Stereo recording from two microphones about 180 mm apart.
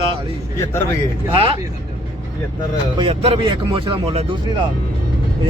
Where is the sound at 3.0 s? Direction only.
30° right (ahead or behind).